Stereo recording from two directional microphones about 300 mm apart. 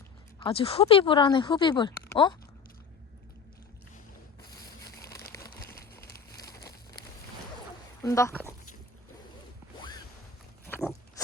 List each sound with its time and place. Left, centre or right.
0.3 s speech: centre
5.0 s crumpling: centre
5.8 s a sound: left
6.4 s crumpling: centre
8.0 s speech: centre